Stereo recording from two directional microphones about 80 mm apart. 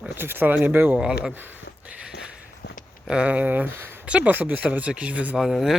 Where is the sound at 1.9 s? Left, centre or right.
Centre.